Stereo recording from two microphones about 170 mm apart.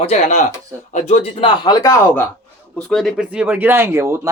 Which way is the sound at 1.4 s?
20° left (ahead or behind).